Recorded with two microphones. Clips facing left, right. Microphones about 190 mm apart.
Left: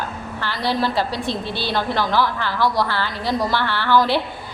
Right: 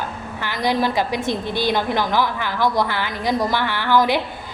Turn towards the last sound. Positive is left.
turn(degrees=-15)  # may be behind; listen again after turning